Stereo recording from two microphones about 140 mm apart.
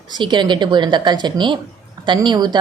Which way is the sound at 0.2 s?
35° right (ahead or behind).